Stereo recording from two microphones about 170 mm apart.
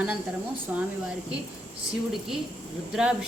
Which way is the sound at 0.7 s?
10° right (ahead or behind).